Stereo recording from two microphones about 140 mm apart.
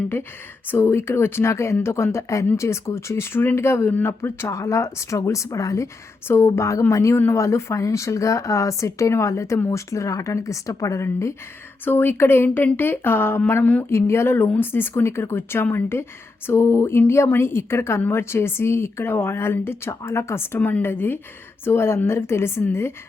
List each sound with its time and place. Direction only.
0.7 s a woman's voice: 15° left (ahead or behind)